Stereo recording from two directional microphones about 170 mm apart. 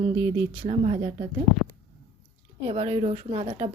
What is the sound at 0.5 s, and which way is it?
Speech, 35° right (ahead or behind).